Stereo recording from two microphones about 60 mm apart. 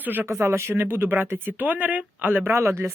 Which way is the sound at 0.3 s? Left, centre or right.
Right.